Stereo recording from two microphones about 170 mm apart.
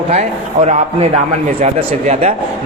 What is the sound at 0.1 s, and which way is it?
A man's voice, 40° right (ahead or behind).